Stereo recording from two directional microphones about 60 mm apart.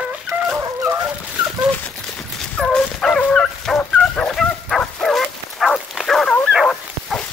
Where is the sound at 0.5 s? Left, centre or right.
Right.